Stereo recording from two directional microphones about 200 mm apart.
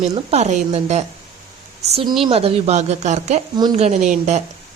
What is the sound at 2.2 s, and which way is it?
Speech, 30° right (ahead or behind).